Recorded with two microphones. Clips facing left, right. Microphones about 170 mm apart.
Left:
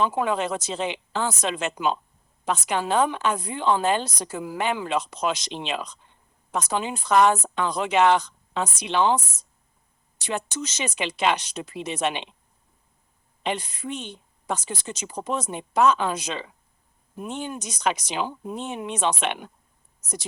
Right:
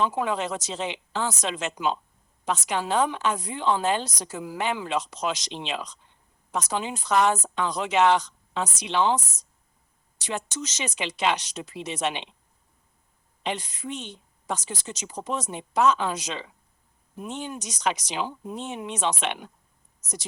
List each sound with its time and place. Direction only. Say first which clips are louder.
0.0 s a woman's voice: left 2 dB; 55° left (ahead or behind)
13.4 s a woman's voice: left 2 dB; 55° left (ahead or behind)